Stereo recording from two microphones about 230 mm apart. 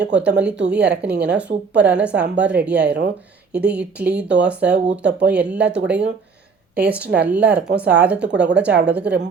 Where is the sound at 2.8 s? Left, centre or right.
Right.